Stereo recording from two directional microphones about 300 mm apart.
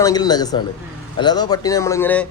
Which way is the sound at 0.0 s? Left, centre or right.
Centre.